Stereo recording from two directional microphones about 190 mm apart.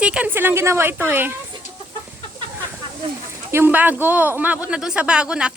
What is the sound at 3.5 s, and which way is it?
Speech, 10° right (ahead or behind).